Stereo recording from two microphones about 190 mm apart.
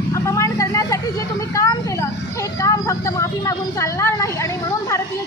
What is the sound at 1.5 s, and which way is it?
Speech, 15° left (ahead or behind).